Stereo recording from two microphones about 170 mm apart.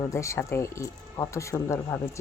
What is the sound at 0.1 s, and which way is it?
Speech, 15° left (ahead or behind).